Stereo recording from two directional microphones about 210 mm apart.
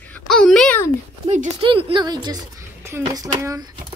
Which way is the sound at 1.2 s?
30° right (ahead or behind).